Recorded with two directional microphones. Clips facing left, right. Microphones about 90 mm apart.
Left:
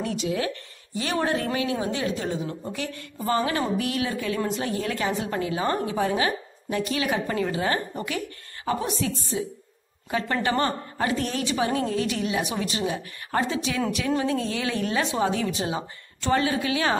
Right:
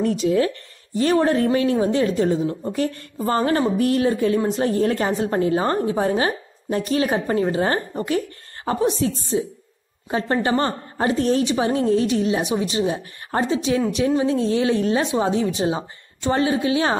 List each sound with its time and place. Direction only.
0.0 s a woman's voice: 45° right (ahead or behind)